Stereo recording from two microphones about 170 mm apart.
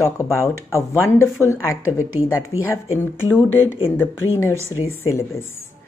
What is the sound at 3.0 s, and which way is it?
A woman's voice, 15° left (ahead or behind).